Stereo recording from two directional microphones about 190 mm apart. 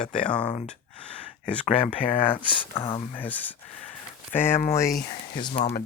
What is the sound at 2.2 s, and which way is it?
Speech, 10° left (ahead or behind).